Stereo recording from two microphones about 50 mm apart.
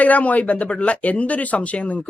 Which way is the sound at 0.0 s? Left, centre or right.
Left.